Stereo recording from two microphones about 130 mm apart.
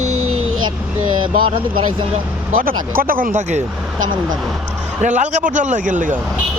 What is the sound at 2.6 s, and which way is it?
Speech, 90° right.